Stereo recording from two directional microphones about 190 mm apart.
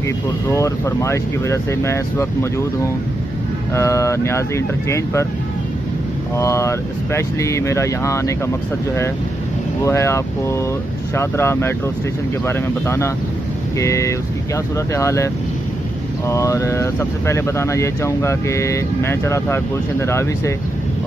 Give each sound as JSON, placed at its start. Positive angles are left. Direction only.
{"t": 0.5, "sound": "speech", "side_deg": 15}
{"t": 3.7, "sound": "speech", "side_deg": 15}
{"t": 6.3, "sound": "speech", "side_deg": 15}
{"t": 9.8, "sound": "speech", "side_deg": 15}